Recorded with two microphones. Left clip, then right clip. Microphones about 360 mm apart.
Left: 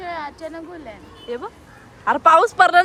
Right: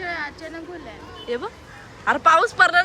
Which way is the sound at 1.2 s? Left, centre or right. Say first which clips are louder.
Right 1 dB; centre.